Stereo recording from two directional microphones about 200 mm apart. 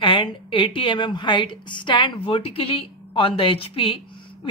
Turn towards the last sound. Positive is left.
turn(degrees=25)  # may be behind; listen again after turning